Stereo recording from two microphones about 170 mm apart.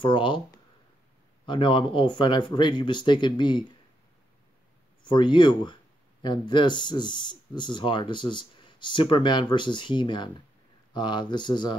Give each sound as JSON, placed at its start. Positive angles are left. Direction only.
{"t": 0.0, "sound": "speech", "side_deg": 30}
{"t": 1.4, "sound": "speech", "side_deg": 30}
{"t": 5.0, "sound": "speech", "side_deg": 30}